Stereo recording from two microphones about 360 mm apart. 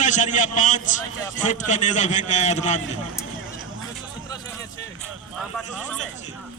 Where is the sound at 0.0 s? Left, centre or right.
Centre.